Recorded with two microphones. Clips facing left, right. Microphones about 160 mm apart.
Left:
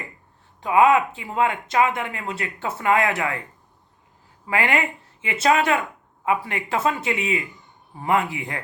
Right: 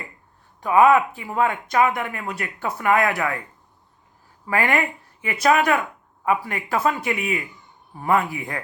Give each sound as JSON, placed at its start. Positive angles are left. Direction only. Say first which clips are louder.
{"t": 0.6, "sound": "speech", "louder": "right 1 dB", "side_deg": 20}
{"t": 4.4, "sound": "speech", "louder": "right 1 dB", "side_deg": 20}